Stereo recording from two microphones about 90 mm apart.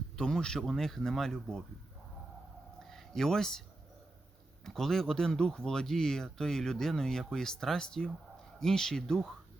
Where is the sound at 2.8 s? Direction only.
5° left (ahead or behind).